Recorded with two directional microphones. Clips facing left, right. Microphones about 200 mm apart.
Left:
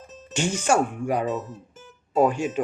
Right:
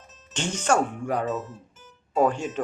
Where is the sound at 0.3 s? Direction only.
10° left (ahead or behind).